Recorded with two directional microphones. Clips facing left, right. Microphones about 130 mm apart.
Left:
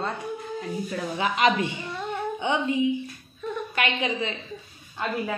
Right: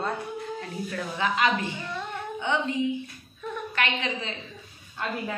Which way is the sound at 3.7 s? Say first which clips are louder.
Left 2 dB; 15° left (ahead or behind).